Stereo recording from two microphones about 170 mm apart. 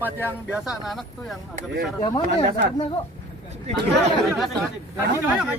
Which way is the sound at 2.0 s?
20° left (ahead or behind).